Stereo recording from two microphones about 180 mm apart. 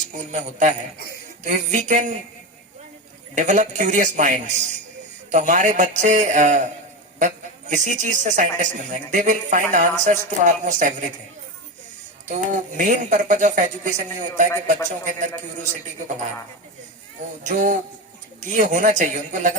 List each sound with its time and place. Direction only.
0.2 s speech: 45° right (ahead or behind)
3.3 s speech: 45° right (ahead or behind)
12.3 s speech: 45° right (ahead or behind)
17.4 s speech: 45° right (ahead or behind)